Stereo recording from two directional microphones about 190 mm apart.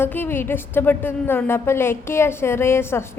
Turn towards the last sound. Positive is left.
turn(degrees=15)  # may be behind; listen again after turning